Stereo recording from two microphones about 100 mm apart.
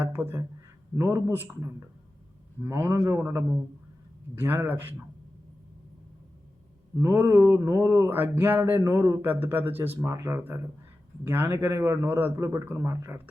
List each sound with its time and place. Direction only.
0.0 s speech: 20° right (ahead or behind)
7.0 s speech: 30° right (ahead or behind)
8.8 s a man's voice: 30° right (ahead or behind)